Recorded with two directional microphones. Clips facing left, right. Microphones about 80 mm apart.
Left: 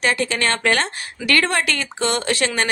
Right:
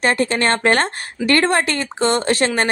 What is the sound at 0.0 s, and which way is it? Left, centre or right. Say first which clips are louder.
A woman's voice: right 3 dB; right.